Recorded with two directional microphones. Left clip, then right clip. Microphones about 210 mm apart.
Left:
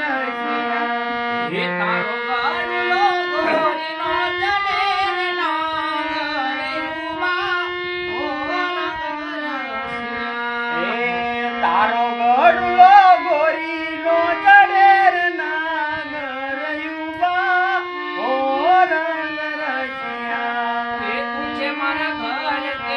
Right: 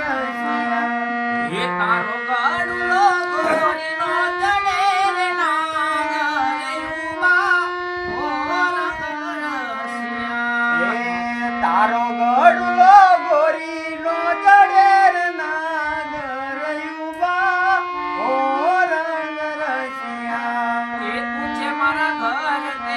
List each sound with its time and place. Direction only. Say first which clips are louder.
0.1 s music: even; 25° right (ahead or behind)
11.6 s a sound: even; 50° right (ahead or behind)
14.4 s music: even; 50° right (ahead or behind)
18.5 s music: left 6 dB; 45° right (ahead or behind)